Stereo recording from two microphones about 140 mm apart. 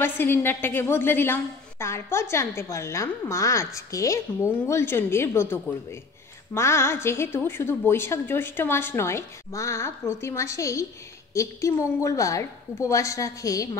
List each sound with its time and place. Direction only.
0.0 s a woman's voice: 15° left (ahead or behind)